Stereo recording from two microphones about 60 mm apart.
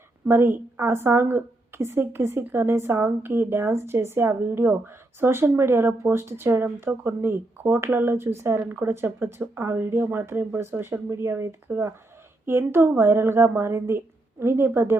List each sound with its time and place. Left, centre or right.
0.3 s speech: right
9.0 s speech: right